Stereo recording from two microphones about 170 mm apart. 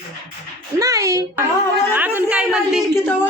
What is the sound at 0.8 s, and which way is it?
A woman's voice, 20° right (ahead or behind).